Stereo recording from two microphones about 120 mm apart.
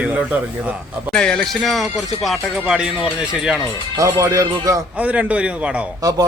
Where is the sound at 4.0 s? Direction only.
25° right (ahead or behind).